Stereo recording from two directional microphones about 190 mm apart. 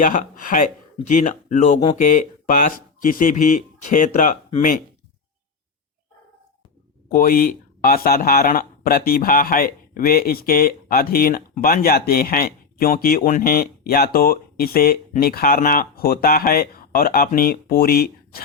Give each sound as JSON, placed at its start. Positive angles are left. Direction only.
{"t": 0.0, "sound": "speech", "side_deg": 45}
{"t": 7.1, "sound": "speech", "side_deg": 50}